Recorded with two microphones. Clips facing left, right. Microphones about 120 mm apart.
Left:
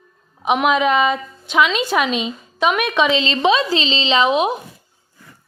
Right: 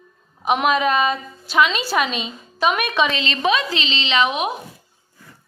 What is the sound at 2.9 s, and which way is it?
A woman's voice, 25° left (ahead or behind).